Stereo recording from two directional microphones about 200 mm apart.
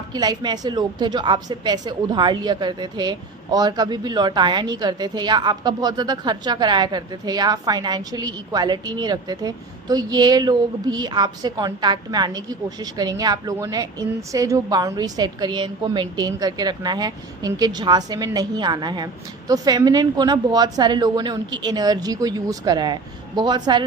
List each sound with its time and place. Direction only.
0.1 s a woman's voice: 20° right (ahead or behind)